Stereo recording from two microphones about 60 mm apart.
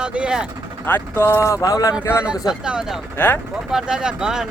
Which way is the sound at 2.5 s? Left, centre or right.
Centre.